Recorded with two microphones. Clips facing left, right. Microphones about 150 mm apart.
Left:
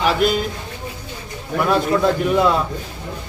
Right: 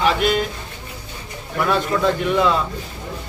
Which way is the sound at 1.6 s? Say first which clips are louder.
Left 2 dB; 5° left (ahead or behind).